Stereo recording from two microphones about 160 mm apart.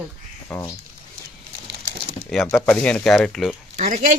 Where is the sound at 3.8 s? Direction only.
55° right (ahead or behind).